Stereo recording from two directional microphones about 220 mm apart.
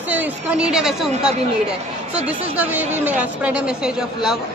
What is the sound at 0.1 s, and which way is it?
A woman's voice, 5° right (ahead or behind).